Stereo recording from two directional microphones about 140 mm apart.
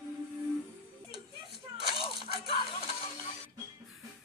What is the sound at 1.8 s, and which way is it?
Coin, 40° left (ahead or behind).